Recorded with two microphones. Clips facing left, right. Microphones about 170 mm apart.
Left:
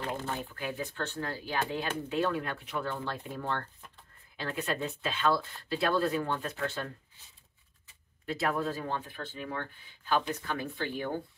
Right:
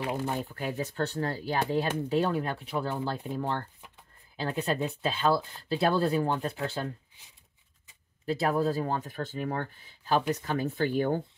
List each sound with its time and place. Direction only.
0.0 s speech: 15° right (ahead or behind)
0.4 s speech: 40° right (ahead or behind)
8.3 s speech: 35° right (ahead or behind); by 11.2 s 50° right (ahead or behind)